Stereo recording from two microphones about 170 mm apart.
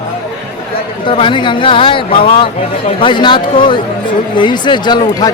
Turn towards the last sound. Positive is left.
turn(degrees=25)  # may be behind; listen again after turning